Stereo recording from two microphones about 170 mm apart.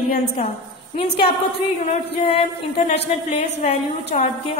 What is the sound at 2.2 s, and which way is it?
A woman's voice, 35° left (ahead or behind).